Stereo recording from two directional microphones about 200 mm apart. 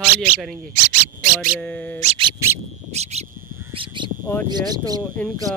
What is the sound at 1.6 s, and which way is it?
Speech, 5° left (ahead or behind).